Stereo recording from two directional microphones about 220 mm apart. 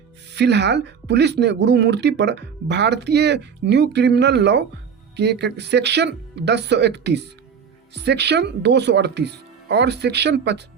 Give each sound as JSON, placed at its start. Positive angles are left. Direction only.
{"t": 0.3, "sound": "speech", "side_deg": -50}